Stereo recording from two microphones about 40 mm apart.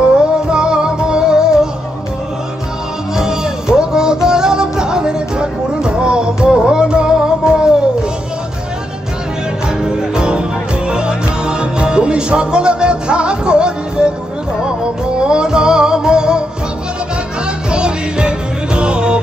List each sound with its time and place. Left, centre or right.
0.2 s music: right
3.2 s music: centre
9.8 s music: centre
17.6 s music: right